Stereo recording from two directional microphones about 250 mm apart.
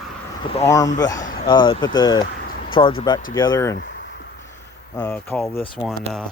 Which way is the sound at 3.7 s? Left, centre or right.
Left.